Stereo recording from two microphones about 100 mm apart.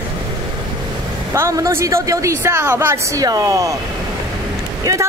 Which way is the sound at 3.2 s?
40° right (ahead or behind).